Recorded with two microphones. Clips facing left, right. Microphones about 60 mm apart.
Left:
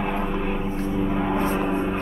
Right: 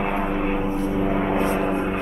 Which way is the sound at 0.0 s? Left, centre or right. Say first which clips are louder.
Right 2 dB; right.